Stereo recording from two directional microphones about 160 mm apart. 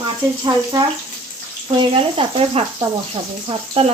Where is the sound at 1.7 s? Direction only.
35° right (ahead or behind).